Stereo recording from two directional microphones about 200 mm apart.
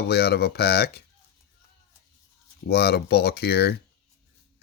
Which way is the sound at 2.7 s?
55° left (ahead or behind).